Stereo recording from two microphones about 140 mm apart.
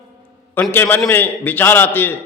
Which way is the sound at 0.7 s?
15° left (ahead or behind).